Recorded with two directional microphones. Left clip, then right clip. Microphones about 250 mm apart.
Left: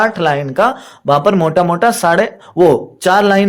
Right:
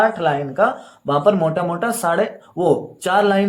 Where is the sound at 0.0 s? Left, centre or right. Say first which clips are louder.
Left 4 dB; left.